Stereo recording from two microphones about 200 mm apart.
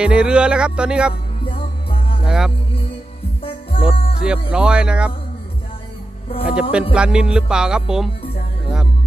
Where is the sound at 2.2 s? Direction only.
5° right (ahead or behind).